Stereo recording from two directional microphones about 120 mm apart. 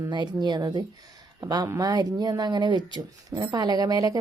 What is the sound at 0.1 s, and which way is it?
Speech, 40° right (ahead or behind).